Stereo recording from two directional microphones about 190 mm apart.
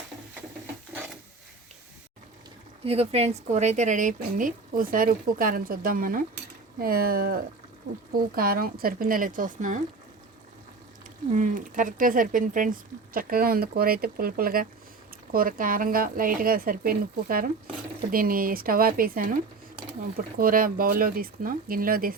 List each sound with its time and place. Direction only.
2.8 s speech: 30° right (ahead or behind)
11.3 s speech: 45° right (ahead or behind)